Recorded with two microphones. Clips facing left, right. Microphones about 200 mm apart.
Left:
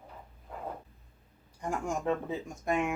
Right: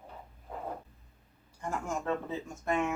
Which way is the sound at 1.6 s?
15° left (ahead or behind).